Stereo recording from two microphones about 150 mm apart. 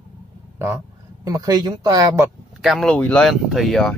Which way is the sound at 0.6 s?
20° right (ahead or behind).